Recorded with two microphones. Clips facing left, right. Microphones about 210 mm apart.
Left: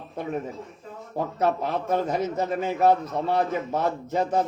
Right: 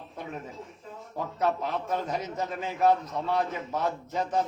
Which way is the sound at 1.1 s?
45° left (ahead or behind).